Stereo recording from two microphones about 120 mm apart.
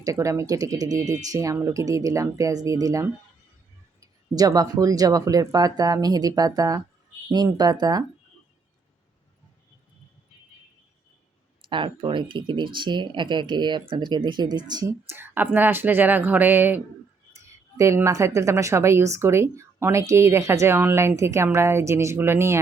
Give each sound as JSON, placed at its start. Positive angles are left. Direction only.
{"t": 0.0, "sound": "speech", "side_deg": -25}
{"t": 11.7, "sound": "speech", "side_deg": -45}
{"t": 14.8, "sound": "speech", "side_deg": -20}